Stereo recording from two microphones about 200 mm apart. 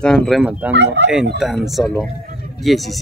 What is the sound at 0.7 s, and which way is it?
Speech, 60° right (ahead or behind).